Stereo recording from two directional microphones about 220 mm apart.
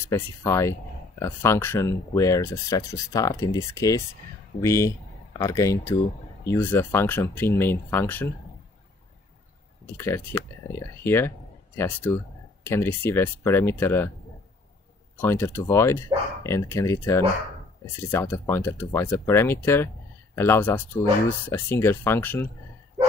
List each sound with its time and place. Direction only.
0.0 s speech: 10° left (ahead or behind)
9.9 s speech: 10° left (ahead or behind)
15.1 s speech: 10° left (ahead or behind)